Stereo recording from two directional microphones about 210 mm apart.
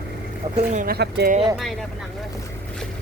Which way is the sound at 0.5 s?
35° right (ahead or behind).